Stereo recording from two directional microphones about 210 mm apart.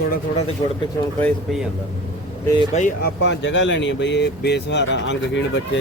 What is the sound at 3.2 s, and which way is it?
Speech, 55° left (ahead or behind).